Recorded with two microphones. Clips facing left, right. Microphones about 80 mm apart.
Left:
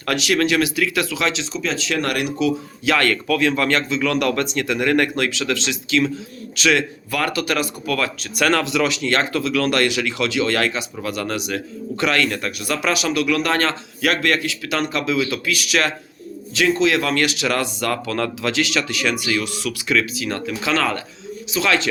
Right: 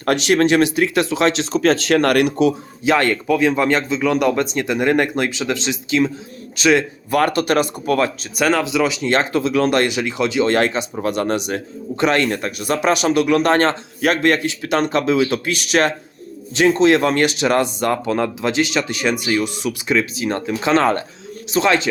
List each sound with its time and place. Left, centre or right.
0.0 s speech: right
2.8 s speech: right
7.1 s speech: right
8.4 s speech: centre